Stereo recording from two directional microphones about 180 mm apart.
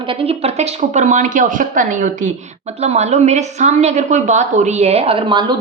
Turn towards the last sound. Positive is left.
turn(degrees=-25)  # may be behind; listen again after turning